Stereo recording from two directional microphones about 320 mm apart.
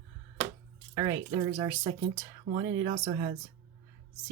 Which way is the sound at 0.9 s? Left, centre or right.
Centre.